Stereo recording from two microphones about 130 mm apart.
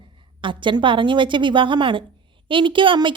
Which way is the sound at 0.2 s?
40° right (ahead or behind).